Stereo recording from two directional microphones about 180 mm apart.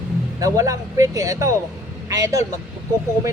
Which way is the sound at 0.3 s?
20° right (ahead or behind).